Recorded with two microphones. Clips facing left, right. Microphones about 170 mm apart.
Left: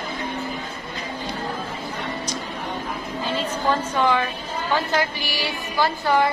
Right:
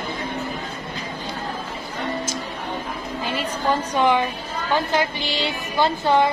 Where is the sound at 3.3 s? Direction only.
15° right (ahead or behind).